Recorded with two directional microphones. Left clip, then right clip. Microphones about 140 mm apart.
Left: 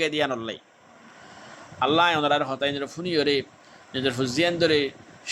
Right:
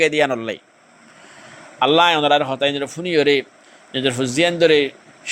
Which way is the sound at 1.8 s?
30° right (ahead or behind).